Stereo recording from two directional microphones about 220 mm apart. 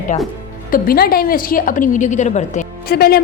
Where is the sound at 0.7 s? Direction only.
45° left (ahead or behind).